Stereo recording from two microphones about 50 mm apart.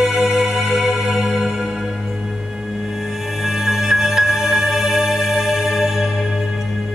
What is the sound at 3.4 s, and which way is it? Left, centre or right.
Music, centre.